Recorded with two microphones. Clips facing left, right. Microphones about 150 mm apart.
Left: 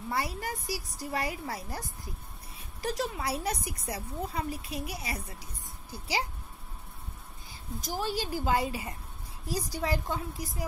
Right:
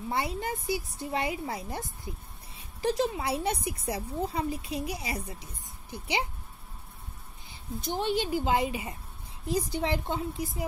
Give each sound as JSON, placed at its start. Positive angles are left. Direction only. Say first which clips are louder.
{"t": 0.1, "sound": "speech", "louder": "right 2 dB", "side_deg": -25}
{"t": 7.9, "sound": "speech", "louder": "right 4 dB", "side_deg": -25}